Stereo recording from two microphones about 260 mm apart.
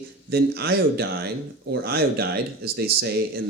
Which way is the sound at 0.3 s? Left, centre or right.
Right.